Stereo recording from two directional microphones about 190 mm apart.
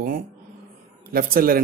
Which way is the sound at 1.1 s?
50° right (ahead or behind).